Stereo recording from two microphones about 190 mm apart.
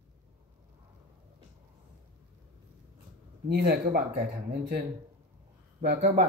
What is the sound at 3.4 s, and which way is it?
Speech, 55° right (ahead or behind).